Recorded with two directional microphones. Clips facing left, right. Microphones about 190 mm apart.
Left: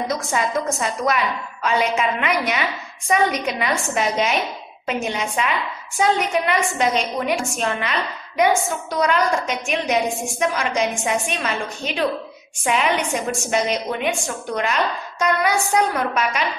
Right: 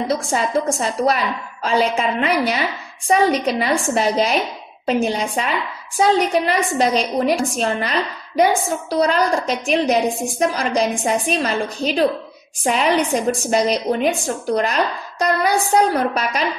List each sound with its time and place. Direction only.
0.1 s a woman's voice: 30° right (ahead or behind)